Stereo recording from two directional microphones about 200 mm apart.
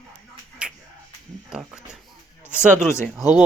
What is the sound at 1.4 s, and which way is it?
Speech, 5° right (ahead or behind).